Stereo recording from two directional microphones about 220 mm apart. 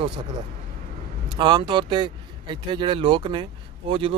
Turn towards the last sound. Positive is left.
turn(degrees=-25)  # may be behind; listen again after turning